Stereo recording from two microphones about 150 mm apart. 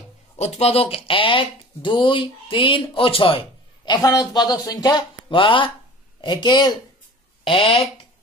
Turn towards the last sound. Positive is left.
turn(degrees=40)  # may be behind; listen again after turning